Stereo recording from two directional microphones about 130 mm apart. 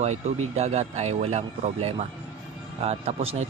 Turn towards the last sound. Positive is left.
turn(degrees=-50)  # may be behind; listen again after turning